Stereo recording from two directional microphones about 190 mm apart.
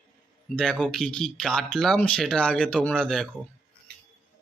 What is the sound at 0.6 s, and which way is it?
Speech, 5° left (ahead or behind).